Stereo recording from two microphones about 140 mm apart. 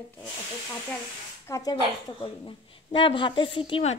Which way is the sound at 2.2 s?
40° left (ahead or behind).